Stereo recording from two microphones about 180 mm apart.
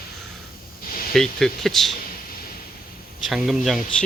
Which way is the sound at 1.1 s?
Centre (ahead or behind).